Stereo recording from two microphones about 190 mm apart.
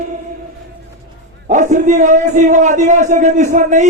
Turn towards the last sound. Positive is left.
turn(degrees=-40)  # may be behind; listen again after turning